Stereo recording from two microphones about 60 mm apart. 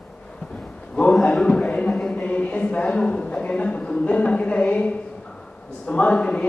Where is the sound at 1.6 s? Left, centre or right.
Centre.